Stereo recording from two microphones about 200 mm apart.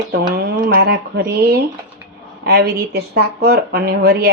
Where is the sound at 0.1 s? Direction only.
50° right (ahead or behind).